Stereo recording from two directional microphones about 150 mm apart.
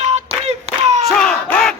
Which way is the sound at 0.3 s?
45° right (ahead or behind).